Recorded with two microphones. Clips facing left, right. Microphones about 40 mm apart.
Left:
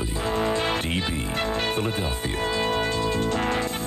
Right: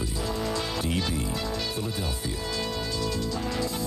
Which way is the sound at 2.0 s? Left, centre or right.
Left.